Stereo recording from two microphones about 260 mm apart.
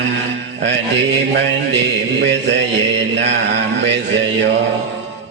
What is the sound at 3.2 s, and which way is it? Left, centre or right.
Mantra, right.